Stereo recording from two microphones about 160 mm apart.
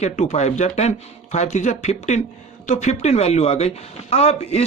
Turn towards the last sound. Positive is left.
turn(degrees=40)  # may be behind; listen again after turning